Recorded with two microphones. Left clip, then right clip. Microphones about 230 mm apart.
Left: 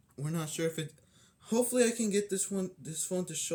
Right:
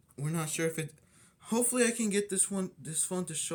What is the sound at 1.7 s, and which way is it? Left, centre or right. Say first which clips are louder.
Speech: even; centre.